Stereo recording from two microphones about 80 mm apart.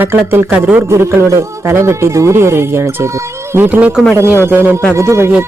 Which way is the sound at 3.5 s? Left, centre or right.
Right.